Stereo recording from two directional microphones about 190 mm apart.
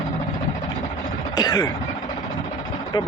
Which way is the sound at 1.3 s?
20° left (ahead or behind).